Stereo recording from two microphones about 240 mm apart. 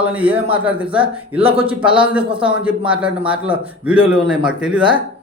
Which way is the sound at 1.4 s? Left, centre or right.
Right.